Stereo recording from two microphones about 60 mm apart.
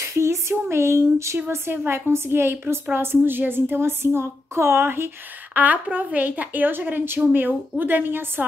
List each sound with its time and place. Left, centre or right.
0.0 s a sound: right
1.5 s a woman's voice: right
5.5 s a woman's voice: right